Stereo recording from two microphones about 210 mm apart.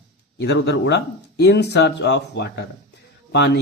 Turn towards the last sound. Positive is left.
turn(degrees=50)  # may be behind; listen again after turning